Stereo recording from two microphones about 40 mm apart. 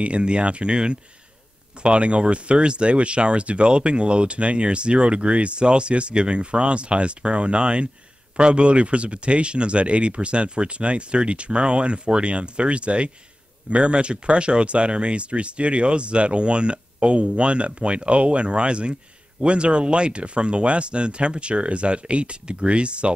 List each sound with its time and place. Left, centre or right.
0.0 s speech: right